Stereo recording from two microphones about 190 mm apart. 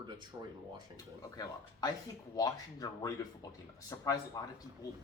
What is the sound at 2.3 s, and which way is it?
Speech, 20° left (ahead or behind).